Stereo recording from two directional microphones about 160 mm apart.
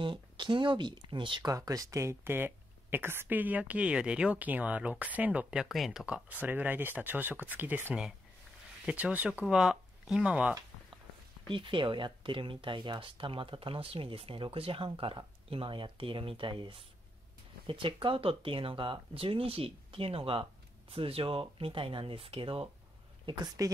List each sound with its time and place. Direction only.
0.0 s speech: 30° right (ahead or behind); by 10.6 s 5° right (ahead or behind)
11.5 s speech: 30° right (ahead or behind)